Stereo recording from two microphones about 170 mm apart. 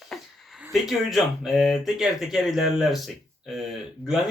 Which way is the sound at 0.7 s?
Centre (ahead or behind).